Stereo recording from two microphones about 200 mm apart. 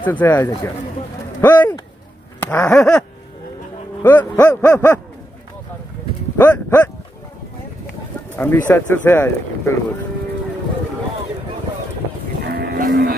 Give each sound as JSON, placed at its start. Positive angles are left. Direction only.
{"t": 0.0, "sound": "speech", "side_deg": 10}
{"t": 6.3, "sound": "cattle", "side_deg": 10}
{"t": 8.4, "sound": "speech", "side_deg": 10}
{"t": 12.5, "sound": "livestock", "side_deg": -45}